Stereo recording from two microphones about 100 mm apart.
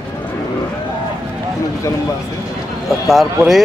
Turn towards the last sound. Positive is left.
turn(degrees=0)  # may be behind; listen again after turning